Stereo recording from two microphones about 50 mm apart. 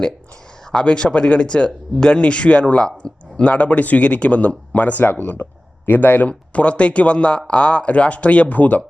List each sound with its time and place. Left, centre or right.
0.7 s speech: centre